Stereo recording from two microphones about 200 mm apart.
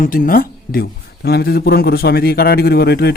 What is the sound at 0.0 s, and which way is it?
Speech, 45° left (ahead or behind).